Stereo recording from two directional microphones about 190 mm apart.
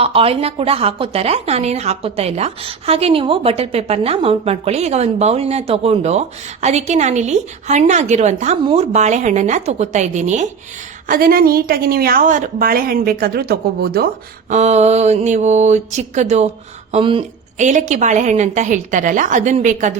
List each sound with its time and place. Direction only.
0.0 s speech: 30° right (ahead or behind)
11.1 s a woman's voice: 50° right (ahead or behind)
14.5 s speech: 35° right (ahead or behind)
17.6 s speech: 40° right (ahead or behind)